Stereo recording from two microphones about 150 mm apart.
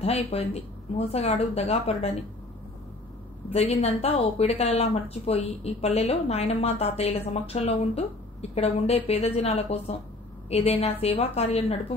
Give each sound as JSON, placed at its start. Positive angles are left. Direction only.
{"t": 0.0, "sound": "a woman's voice", "side_deg": 40}
{"t": 3.5, "sound": "a woman's voice", "side_deg": 45}